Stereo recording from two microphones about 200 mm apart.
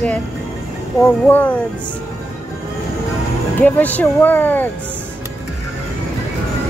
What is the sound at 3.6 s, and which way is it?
Speech, 10° left (ahead or behind).